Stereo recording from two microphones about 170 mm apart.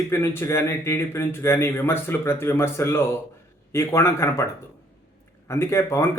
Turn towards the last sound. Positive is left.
turn(degrees=15)  # may be behind; listen again after turning